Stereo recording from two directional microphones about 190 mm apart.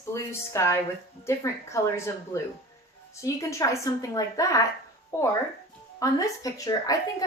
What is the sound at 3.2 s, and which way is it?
A woman's voice, 15° left (ahead or behind).